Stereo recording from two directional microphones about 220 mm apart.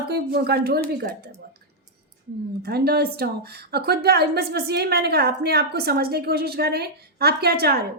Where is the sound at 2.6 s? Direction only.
45° right (ahead or behind).